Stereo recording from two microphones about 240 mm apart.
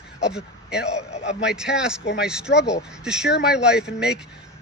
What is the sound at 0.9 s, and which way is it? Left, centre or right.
Speech, left.